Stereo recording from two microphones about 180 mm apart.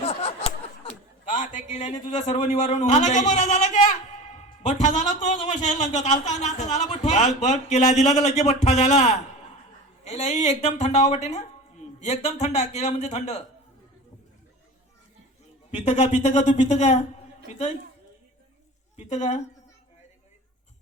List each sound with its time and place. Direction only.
0.0 s a sound: 35° left (ahead or behind)
1.3 s a man's voice: 45° left (ahead or behind)
15.8 s a man's voice: 35° left (ahead or behind)
18.9 s a man's voice: 40° left (ahead or behind)